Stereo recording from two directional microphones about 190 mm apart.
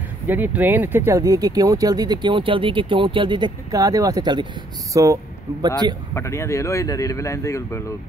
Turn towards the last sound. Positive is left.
turn(degrees=15)  # may be behind; listen again after turning